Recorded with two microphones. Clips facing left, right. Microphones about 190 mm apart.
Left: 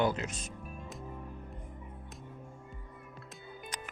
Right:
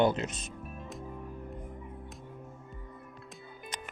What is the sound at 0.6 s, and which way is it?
Music, centre (ahead or behind).